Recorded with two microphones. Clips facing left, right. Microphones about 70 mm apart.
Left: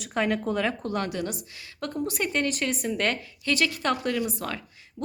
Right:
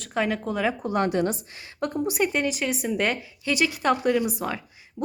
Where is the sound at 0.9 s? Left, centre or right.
Right.